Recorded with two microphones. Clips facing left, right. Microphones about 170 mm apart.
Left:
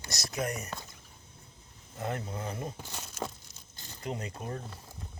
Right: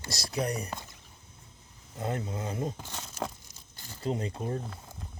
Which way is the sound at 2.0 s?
25° right (ahead or behind).